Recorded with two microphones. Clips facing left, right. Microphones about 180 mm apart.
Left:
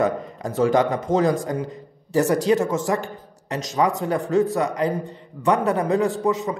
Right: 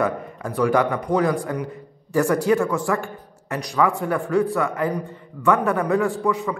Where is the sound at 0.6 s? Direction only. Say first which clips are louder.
Left 1 dB; 20° left (ahead or behind).